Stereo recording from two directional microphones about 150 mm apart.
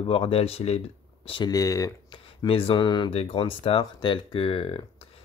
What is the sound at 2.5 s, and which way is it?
Speech, 35° left (ahead or behind).